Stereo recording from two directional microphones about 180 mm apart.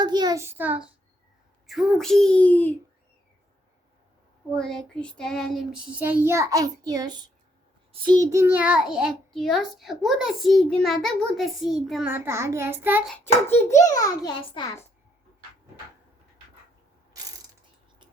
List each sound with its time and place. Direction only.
0.0 s a child's voice: 25° right (ahead or behind); by 2.7 s 10° left (ahead or behind)
4.5 s child singing: 5° left (ahead or behind); by 7.3 s 20° right (ahead or behind)
8.0 s a child's voice: 20° right (ahead or behind); by 12.1 s 5° right (ahead or behind)
12.1 s child singing: 15° right (ahead or behind)
13.1 s a child's voice: 10° left (ahead or behind)